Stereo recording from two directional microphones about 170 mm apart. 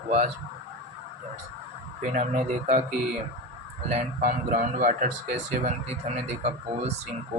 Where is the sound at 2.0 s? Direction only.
45° right (ahead or behind).